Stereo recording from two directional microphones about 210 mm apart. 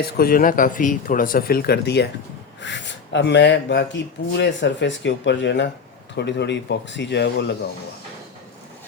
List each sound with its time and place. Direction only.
0.0 s speech: 45° left (ahead or behind)